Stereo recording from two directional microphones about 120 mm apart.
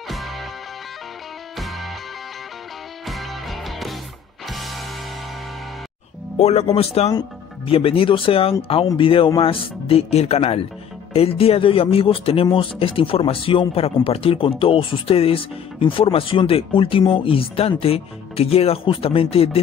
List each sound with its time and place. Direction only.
0.1 s music: centre (ahead or behind)
1.6 s music: centre (ahead or behind)
3.1 s music: centre (ahead or behind)
6.3 s speech: 65° left (ahead or behind)